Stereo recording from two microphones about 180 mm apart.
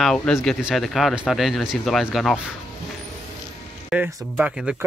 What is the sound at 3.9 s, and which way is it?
Speech, 5° right (ahead or behind).